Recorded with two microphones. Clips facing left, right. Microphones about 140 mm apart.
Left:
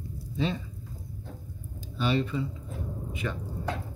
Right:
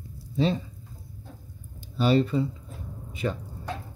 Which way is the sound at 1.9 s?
35° right (ahead or behind).